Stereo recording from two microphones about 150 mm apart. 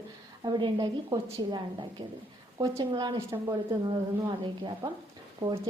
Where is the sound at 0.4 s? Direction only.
30° right (ahead or behind).